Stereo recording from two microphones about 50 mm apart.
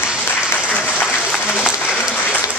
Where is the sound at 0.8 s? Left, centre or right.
Left.